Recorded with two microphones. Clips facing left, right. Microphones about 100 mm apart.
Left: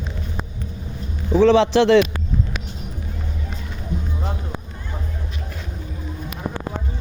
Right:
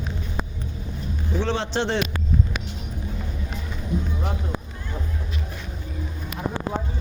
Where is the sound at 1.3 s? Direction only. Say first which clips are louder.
Left 12 dB; 90° left.